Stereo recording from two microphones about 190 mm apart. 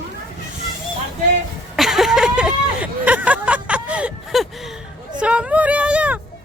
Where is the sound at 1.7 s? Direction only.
Centre (ahead or behind).